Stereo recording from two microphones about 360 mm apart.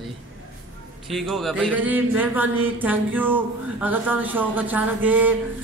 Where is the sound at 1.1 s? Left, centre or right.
Centre.